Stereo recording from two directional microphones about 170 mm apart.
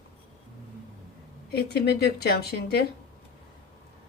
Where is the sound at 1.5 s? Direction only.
70° left (ahead or behind).